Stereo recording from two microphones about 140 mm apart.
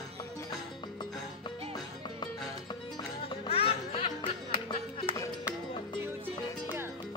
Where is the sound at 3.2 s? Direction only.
45° left (ahead or behind).